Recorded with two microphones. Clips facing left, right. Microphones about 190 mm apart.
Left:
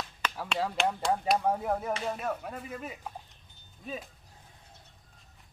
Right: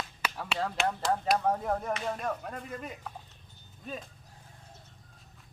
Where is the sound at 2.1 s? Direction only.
5° left (ahead or behind).